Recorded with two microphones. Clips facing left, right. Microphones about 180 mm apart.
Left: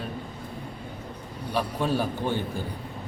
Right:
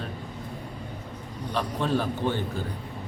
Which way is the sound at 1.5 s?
10° left (ahead or behind).